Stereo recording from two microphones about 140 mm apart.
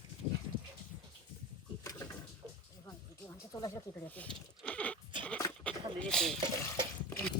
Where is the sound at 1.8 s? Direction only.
25° left (ahead or behind).